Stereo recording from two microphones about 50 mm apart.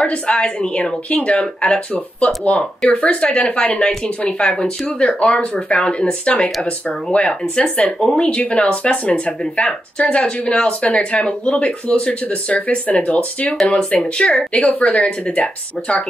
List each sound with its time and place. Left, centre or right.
0.0 s speech: left